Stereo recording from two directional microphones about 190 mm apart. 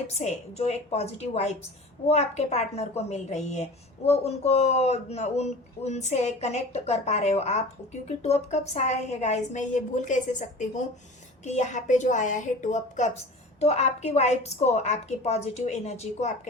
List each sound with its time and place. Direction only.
0.1 s a woman's voice: 35° left (ahead or behind)